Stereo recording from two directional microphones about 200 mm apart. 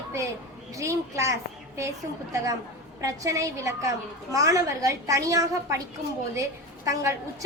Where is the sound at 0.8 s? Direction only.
15° right (ahead or behind).